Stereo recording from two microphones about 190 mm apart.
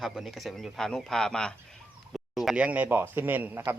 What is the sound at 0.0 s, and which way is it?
A man's voice, centre (ahead or behind).